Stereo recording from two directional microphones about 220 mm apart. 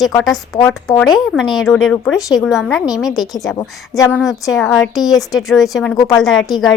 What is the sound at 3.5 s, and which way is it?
Speech, 10° left (ahead or behind).